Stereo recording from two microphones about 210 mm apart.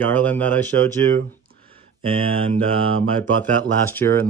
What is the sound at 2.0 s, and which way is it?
Speech, 25° right (ahead or behind).